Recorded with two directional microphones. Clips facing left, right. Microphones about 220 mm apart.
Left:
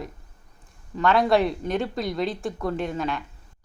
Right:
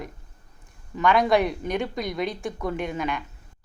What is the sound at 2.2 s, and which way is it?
Speech, centre (ahead or behind).